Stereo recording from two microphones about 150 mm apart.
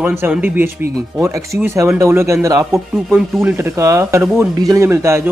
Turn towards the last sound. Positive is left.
turn(degrees=-20)  # may be behind; listen again after turning